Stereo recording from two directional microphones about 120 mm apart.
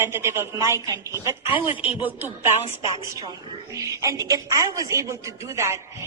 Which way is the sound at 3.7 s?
25° right (ahead or behind).